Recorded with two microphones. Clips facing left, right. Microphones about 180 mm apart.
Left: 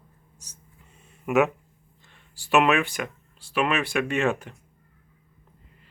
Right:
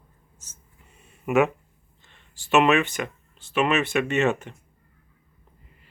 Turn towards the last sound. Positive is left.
turn(degrees=0)  # may be behind; listen again after turning